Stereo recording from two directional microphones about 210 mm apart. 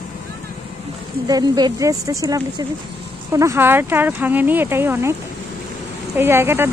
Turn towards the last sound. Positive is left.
turn(degrees=-10)  # may be behind; listen again after turning